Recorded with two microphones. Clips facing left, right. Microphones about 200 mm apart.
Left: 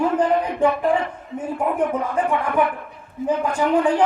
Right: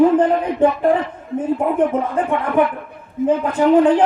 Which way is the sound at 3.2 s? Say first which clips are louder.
Right 5 dB; 25° right (ahead or behind).